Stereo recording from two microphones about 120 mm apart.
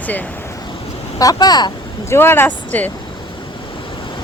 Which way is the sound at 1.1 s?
30° left (ahead or behind).